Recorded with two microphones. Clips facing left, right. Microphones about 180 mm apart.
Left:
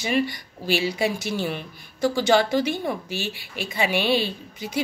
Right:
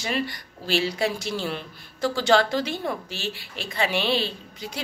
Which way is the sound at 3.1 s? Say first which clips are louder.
Left 3 dB; 55° left (ahead or behind).